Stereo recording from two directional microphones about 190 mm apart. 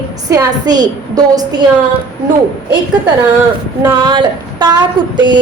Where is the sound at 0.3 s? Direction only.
20° right (ahead or behind).